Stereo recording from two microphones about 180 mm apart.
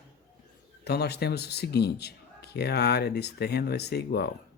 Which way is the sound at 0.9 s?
65° left (ahead or behind).